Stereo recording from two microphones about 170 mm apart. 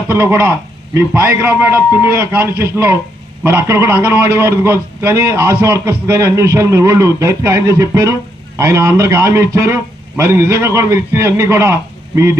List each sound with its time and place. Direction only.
0.1 s a man's voice: 15° right (ahead or behind)